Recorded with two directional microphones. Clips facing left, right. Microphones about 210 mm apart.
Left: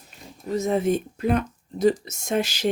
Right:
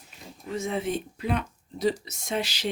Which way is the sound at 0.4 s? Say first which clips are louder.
Left 7 dB; 40° left (ahead or behind).